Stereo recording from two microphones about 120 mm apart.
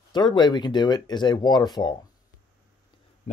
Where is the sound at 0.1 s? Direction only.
40° left (ahead or behind).